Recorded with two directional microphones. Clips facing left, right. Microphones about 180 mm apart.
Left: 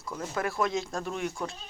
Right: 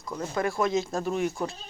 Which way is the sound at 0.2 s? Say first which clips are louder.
Right 3 dB; 5° left (ahead or behind).